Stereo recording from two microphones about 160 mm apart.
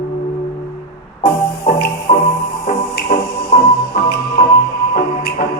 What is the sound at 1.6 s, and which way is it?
Music, 75° left (ahead or behind).